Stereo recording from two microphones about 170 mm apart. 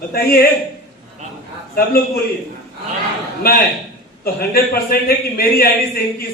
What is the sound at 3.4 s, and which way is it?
A man's voice, 65° left (ahead or behind).